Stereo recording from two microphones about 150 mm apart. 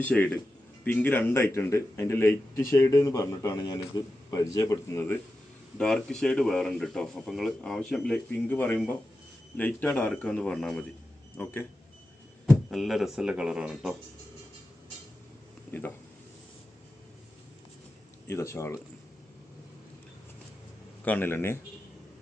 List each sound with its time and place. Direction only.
0.0 s a man's voice: 10° left (ahead or behind)
12.7 s speech: centre (ahead or behind)
18.3 s a man's voice: 20° left (ahead or behind)
21.0 s speech: 10° left (ahead or behind)